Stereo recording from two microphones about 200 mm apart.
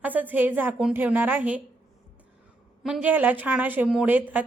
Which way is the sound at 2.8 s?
5° right (ahead or behind).